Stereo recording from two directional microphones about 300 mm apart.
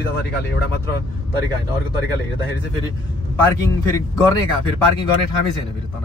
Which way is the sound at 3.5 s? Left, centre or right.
Centre.